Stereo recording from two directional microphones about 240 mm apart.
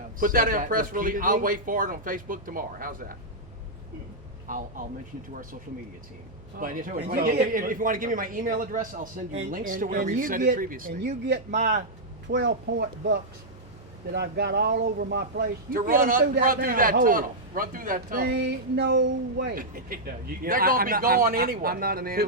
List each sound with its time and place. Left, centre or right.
0.2 s speech: right
4.4 s speech: right
6.6 s speech: right
12.4 s speech: right